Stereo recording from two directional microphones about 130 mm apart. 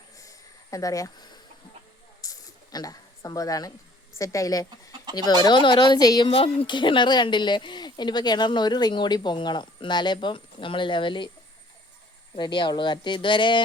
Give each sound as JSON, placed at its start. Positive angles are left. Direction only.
{"t": 0.2, "sound": "a sound", "side_deg": 25}
{"t": 4.2, "sound": "a woman's voice", "side_deg": 25}
{"t": 6.3, "sound": "speech", "side_deg": 45}
{"t": 12.4, "sound": "speech", "side_deg": 35}